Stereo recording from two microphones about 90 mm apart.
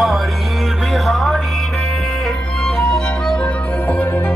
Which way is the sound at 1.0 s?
Centre (ahead or behind).